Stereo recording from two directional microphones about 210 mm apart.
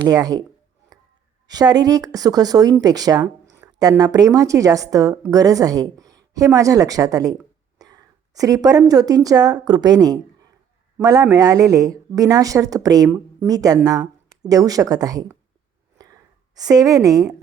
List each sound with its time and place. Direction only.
0.0 s speech: 15° right (ahead or behind)
1.5 s a woman's voice: 20° right (ahead or behind)
16.6 s speech: 15° right (ahead or behind)